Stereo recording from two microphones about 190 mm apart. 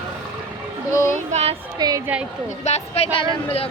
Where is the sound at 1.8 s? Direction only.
20° right (ahead or behind).